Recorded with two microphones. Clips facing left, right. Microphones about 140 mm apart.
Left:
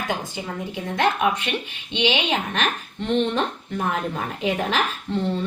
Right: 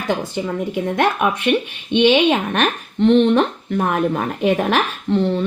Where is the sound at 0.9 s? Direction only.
60° right (ahead or behind).